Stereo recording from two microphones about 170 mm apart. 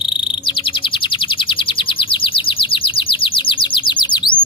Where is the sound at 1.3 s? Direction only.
30° left (ahead or behind).